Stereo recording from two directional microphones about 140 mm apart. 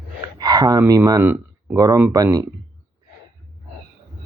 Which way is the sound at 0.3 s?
30° right (ahead or behind).